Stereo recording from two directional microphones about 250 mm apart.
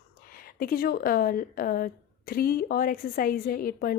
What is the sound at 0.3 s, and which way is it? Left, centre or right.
A woman's voice, left.